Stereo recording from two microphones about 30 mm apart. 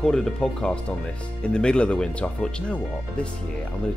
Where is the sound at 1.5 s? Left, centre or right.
Left.